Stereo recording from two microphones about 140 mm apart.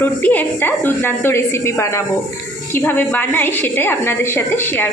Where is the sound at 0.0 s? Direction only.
10° left (ahead or behind).